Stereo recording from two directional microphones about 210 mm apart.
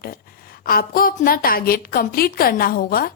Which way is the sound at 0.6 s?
45° left (ahead or behind).